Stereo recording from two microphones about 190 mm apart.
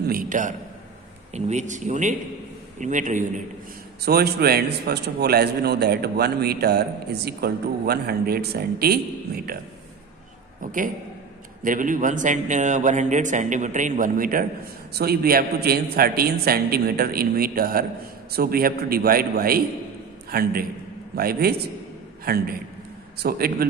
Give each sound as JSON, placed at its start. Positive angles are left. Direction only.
{"t": 0.0, "sound": "a man's voice", "side_deg": -50}
{"t": 4.0, "sound": "a man's voice", "side_deg": -55}
{"t": 10.6, "sound": "a man's voice", "side_deg": -45}